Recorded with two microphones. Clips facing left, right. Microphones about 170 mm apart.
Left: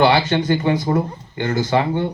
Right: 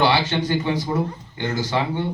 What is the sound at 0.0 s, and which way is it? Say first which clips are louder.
Speech: left 4 dB; 50° left (ahead or behind).